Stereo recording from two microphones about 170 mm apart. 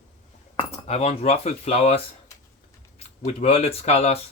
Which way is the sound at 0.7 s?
40° left (ahead or behind).